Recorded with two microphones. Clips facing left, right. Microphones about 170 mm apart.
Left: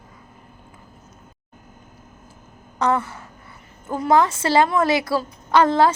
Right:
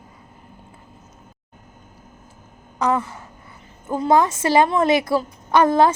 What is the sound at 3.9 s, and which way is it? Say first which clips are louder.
A woman's voice: right 1 dB; 20° right (ahead or behind).